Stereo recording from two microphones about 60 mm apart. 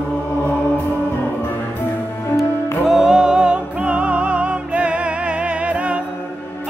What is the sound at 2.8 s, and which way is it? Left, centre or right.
Music, centre.